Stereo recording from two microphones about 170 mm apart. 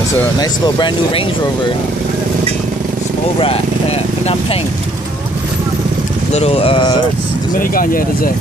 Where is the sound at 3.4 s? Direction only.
35° left (ahead or behind).